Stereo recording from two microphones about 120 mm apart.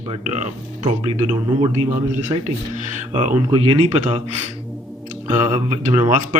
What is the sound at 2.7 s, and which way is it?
Speech, 90° right.